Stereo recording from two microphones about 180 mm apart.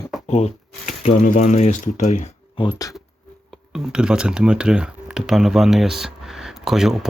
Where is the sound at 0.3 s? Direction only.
40° left (ahead or behind).